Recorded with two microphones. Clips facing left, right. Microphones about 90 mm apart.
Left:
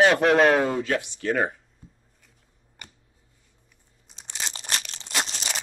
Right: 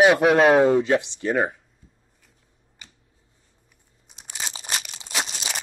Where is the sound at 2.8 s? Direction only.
55° left (ahead or behind).